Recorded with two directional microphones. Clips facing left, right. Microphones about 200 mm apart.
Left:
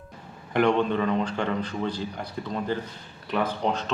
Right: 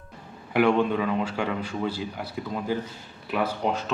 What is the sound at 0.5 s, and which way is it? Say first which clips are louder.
Speech: right 1 dB; 5° right (ahead or behind).